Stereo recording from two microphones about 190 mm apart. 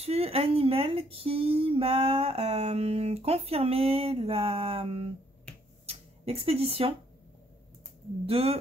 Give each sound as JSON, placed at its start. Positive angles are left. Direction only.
{"t": 0.0, "sound": "speech", "side_deg": -30}
{"t": 5.9, "sound": "a sound", "side_deg": -30}
{"t": 8.3, "sound": "speech", "side_deg": -30}